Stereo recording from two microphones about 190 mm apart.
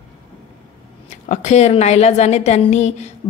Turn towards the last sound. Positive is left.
turn(degrees=35)  # may be behind; listen again after turning